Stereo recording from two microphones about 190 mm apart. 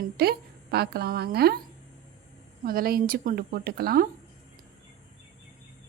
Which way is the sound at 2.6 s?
50° right (ahead or behind).